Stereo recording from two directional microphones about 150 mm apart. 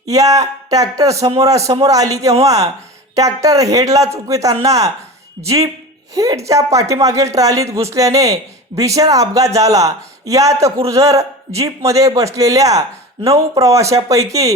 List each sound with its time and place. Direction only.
0.0 s speech: 25° right (ahead or behind)